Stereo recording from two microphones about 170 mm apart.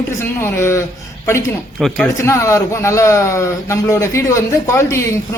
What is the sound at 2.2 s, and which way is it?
A man's voice, 15° left (ahead or behind).